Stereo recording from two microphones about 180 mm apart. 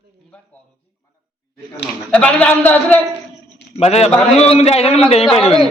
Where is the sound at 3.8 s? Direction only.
35° left (ahead or behind).